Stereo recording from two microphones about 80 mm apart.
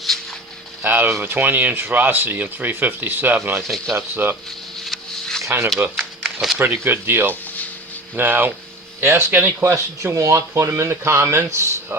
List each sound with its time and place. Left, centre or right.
0.8 s speech: right
3.6 s speech: centre
3.9 s speech: right
4.9 s a sound: centre
5.4 s speech: right
6.2 s a sound: centre
6.8 s speech: right